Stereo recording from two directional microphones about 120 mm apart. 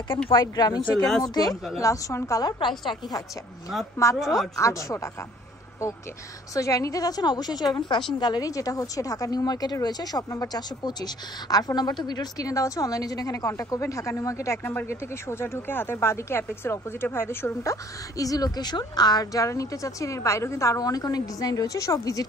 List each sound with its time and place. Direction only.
0.3 s a woman's voice: 35° left (ahead or behind)
6.5 s a woman's voice: 25° left (ahead or behind)